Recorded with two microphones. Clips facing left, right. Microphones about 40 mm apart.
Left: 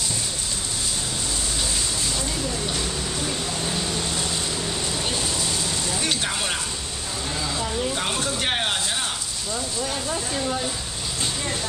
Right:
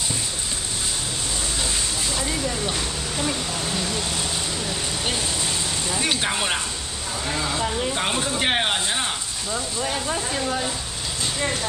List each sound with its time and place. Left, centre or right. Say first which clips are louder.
5.9 s speech: right 4 dB; centre